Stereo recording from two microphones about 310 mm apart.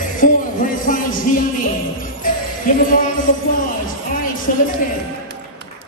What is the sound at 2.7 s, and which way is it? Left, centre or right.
Speech, left.